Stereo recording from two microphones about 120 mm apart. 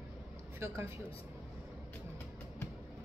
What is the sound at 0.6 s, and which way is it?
Speech, 25° right (ahead or behind).